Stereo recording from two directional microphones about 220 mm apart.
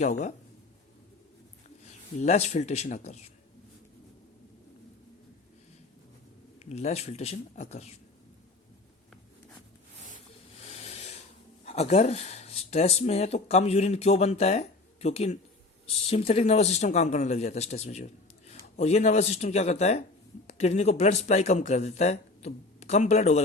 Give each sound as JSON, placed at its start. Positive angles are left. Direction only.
{"t": 0.0, "sound": "speech", "side_deg": 30}
{"t": 2.1, "sound": "speech", "side_deg": 30}
{"t": 6.7, "sound": "speech", "side_deg": 30}
{"t": 10.7, "sound": "a sound", "side_deg": 30}
{"t": 11.6, "sound": "speech", "side_deg": 30}